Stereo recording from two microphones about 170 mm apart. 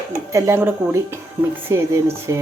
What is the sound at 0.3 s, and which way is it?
Speech, 15° right (ahead or behind).